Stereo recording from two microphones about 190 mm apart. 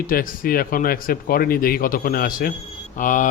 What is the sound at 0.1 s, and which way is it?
Speech, 50° left (ahead or behind).